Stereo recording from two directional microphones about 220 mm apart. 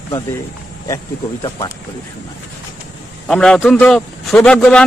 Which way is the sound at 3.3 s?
5° left (ahead or behind).